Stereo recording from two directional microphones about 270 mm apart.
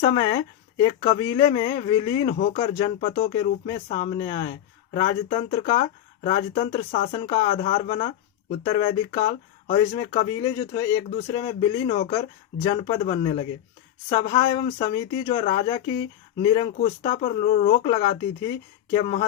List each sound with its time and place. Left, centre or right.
0.0 s speech: centre